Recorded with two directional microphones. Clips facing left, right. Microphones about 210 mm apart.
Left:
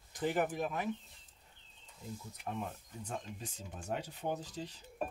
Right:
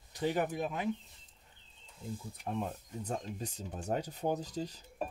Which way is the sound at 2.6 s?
40° right (ahead or behind).